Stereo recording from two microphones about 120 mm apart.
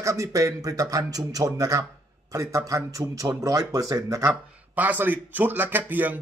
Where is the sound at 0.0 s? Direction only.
25° right (ahead or behind).